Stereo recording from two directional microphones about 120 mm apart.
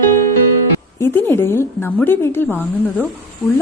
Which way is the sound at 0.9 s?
20° left (ahead or behind).